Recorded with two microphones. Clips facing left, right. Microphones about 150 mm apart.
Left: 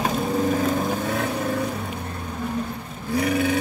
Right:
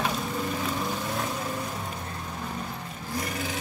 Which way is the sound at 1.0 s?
65° left (ahead or behind).